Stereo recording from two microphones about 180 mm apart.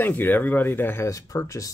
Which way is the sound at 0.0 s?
10° left (ahead or behind).